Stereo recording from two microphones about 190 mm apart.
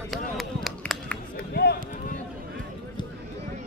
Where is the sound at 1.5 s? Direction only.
60° left (ahead or behind).